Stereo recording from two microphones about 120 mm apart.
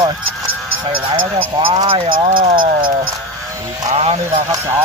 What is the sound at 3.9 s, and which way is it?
Speech, 60° right (ahead or behind).